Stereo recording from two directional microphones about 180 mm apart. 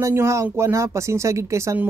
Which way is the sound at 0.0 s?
15° right (ahead or behind).